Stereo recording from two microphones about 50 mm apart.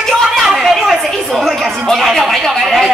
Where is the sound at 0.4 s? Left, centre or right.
Centre.